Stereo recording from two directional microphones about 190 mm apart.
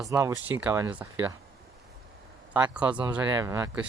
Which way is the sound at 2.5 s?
5° right (ahead or behind).